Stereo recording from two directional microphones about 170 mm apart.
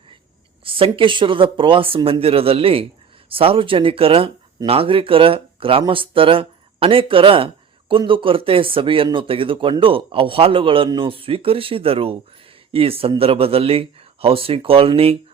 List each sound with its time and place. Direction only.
0.6 s speech: 30° right (ahead or behind)